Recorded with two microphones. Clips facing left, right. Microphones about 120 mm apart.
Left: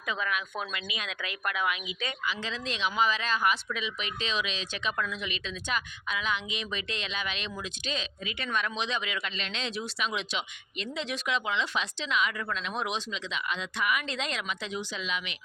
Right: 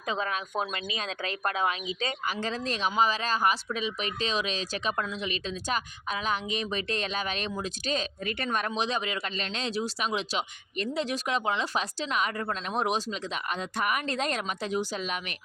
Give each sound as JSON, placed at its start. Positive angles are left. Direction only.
{"t": 0.0, "sound": "speech", "side_deg": -35}